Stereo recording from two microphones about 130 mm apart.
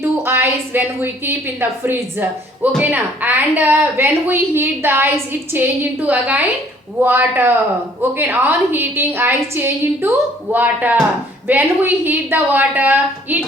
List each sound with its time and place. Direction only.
0.0 s a woman's voice: 20° right (ahead or behind)